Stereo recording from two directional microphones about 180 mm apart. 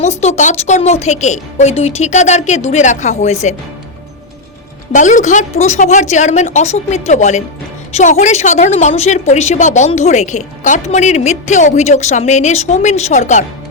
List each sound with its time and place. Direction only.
0.0 s a woman's voice: 40° left (ahead or behind)
4.9 s a woman's voice: 45° left (ahead or behind)